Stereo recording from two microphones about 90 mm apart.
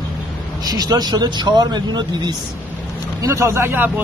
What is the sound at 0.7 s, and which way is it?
Speech, 45° right (ahead or behind).